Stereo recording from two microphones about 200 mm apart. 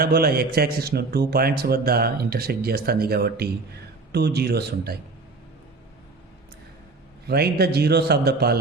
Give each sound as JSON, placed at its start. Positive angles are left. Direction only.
{"t": 0.0, "sound": "a man's voice", "side_deg": -50}
{"t": 7.3, "sound": "a man's voice", "side_deg": -55}